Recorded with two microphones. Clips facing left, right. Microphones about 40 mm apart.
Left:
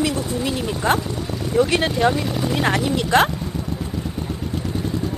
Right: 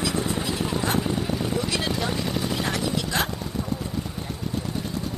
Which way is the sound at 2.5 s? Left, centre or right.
Left.